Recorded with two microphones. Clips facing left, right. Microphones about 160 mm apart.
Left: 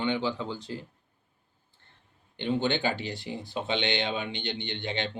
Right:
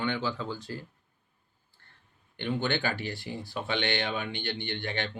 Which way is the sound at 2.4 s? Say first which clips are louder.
Left 3 dB; 20° left (ahead or behind).